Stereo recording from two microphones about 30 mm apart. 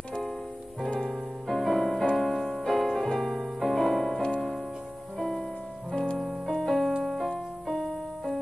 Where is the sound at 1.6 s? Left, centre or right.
Centre.